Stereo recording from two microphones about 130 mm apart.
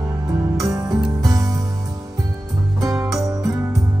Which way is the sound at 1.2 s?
30° right (ahead or behind).